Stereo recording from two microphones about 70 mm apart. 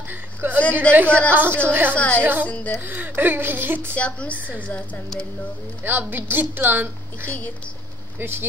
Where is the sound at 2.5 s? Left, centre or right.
Centre.